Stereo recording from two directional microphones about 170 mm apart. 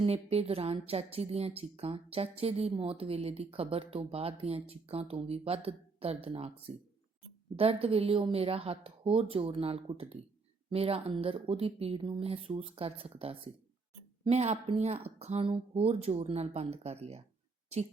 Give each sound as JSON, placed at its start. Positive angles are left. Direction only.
{"t": 0.0, "sound": "a woman's voice", "side_deg": -35}